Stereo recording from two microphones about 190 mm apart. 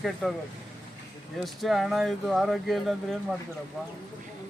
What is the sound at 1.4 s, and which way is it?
Speech, centre (ahead or behind).